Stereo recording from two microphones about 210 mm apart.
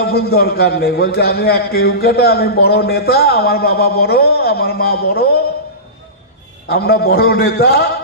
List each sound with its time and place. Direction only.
0.0 s a man's voice: 50° left (ahead or behind)
6.7 s a man's voice: 50° left (ahead or behind)